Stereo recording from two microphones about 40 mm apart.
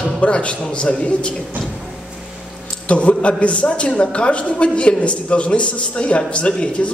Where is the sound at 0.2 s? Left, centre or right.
Left.